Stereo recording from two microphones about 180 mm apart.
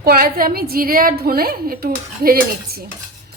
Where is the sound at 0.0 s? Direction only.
55° right (ahead or behind).